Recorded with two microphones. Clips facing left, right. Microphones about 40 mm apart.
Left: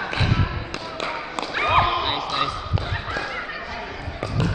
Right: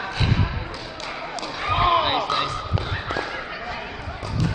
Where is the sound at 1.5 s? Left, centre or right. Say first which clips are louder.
Left 6 dB; left.